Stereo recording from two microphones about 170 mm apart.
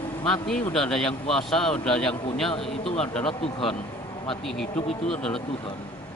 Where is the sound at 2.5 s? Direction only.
35° left (ahead or behind).